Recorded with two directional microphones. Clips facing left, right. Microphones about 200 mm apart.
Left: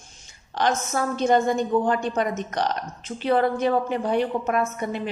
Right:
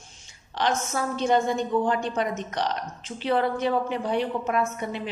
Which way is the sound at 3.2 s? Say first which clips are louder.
Left 3 dB; 45° left (ahead or behind).